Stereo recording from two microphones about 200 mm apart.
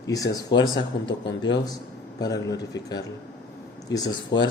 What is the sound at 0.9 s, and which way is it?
Speech, 60° left (ahead or behind).